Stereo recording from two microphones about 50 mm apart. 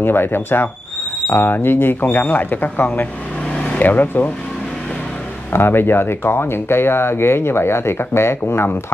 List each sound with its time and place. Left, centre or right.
0.0 s speech: left
5.5 s speech: left